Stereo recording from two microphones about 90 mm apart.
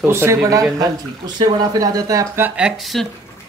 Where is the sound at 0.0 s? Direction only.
30° right (ahead or behind).